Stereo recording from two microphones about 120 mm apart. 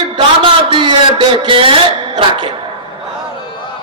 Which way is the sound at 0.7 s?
45° right (ahead or behind).